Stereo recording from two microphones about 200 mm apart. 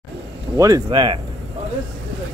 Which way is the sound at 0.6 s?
15° right (ahead or behind).